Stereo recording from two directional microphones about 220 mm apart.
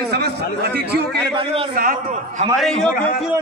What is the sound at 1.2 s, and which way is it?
Speech, 25° right (ahead or behind).